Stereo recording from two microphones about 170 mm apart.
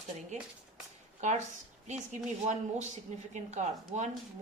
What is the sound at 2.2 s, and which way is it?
Speech, 45° right (ahead or behind).